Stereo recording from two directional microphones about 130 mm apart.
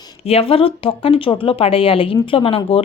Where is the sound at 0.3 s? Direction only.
50° left (ahead or behind).